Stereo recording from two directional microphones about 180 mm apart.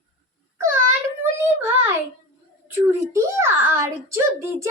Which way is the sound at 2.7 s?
15° right (ahead or behind).